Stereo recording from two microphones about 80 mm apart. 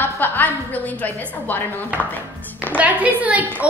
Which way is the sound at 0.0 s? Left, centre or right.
Left.